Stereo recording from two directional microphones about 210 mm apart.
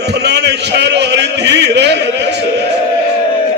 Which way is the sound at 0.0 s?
50° right (ahead or behind).